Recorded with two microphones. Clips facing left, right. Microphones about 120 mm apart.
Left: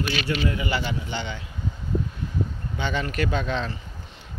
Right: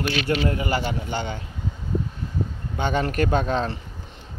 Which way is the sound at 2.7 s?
50° right (ahead or behind).